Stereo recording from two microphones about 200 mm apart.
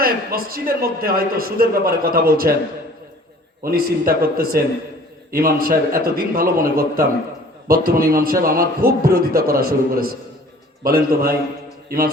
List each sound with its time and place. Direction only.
0.0 s a man's voice: 50° right (ahead or behind)
3.6 s a man's voice: 45° right (ahead or behind)